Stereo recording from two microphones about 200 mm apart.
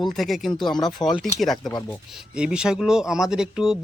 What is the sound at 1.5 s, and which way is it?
Speech, 20° left (ahead or behind).